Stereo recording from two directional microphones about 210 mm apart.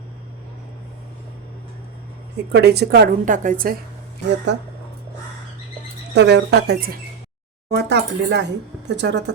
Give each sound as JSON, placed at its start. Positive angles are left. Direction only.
{"t": 2.5, "sound": "a woman's voice", "side_deg": -50}
{"t": 6.1, "sound": "a woman's voice", "side_deg": -55}